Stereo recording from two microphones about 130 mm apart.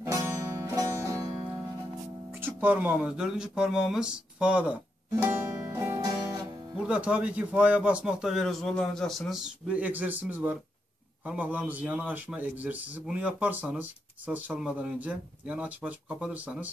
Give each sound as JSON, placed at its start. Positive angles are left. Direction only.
{"t": 0.0, "sound": "music", "side_deg": -25}
{"t": 2.4, "sound": "speech", "side_deg": -15}
{"t": 6.9, "sound": "speech", "side_deg": -10}